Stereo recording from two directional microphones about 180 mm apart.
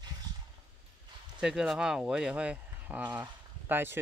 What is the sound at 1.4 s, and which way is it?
Speech, 5° right (ahead or behind).